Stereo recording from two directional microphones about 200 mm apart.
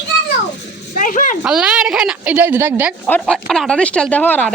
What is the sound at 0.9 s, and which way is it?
Speech, 45° left (ahead or behind).